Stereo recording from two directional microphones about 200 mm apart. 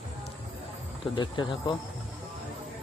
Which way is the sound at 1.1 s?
25° left (ahead or behind).